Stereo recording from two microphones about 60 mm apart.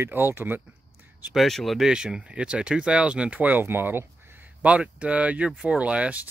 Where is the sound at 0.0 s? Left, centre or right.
Right.